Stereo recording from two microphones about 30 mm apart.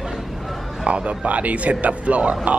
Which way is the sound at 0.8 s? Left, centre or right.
Right.